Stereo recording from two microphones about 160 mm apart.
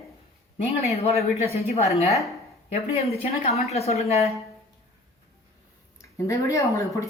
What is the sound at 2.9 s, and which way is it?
A woman's voice, 40° left (ahead or behind).